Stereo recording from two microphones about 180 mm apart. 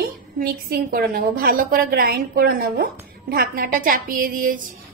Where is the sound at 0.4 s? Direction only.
55° right (ahead or behind).